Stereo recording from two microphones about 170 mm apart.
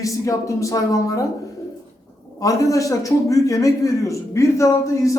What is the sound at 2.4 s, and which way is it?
Speech, 20° left (ahead or behind).